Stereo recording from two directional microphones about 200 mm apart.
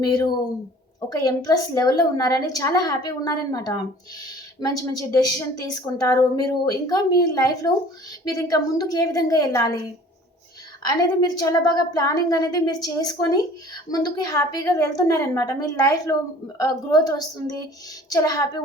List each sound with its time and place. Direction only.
0.0 s a woman's voice: 20° left (ahead or behind)
10.8 s a woman's voice: 20° left (ahead or behind)